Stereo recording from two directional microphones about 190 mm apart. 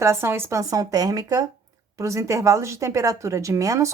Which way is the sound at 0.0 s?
15° right (ahead or behind).